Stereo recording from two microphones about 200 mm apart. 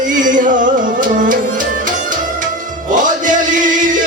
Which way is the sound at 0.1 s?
40° right (ahead or behind).